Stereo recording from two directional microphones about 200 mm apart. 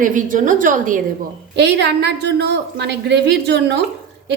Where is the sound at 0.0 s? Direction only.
40° right (ahead or behind).